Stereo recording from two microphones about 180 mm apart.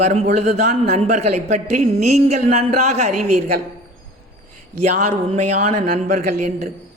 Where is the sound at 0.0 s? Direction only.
40° right (ahead or behind).